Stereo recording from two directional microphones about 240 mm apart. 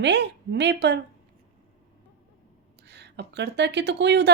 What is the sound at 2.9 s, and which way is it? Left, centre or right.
Speech, right.